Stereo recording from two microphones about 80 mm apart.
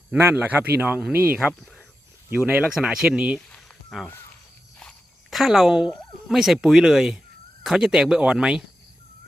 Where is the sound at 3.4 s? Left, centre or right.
Centre.